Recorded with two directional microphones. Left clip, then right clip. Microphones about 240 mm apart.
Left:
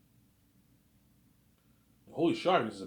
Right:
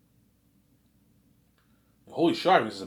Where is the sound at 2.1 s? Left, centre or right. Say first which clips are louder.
Right 6 dB; centre.